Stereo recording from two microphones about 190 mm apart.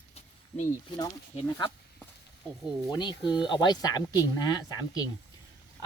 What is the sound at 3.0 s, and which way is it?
Speech, 25° left (ahead or behind).